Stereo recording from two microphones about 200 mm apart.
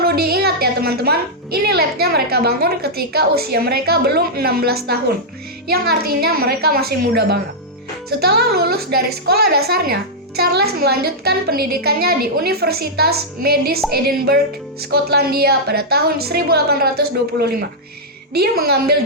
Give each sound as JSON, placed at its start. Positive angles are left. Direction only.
{"t": 0.0, "sound": "a woman's voice", "side_deg": -50}